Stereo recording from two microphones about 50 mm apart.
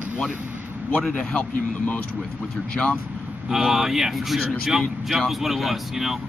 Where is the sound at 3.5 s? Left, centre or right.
Centre.